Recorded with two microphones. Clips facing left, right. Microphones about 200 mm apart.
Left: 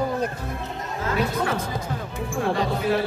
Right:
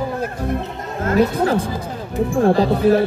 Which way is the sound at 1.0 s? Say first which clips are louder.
Right 8 dB; 40° right (ahead or behind).